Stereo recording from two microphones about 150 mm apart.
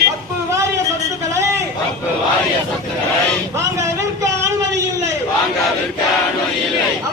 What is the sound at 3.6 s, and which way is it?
Vehicle, 20° right (ahead or behind).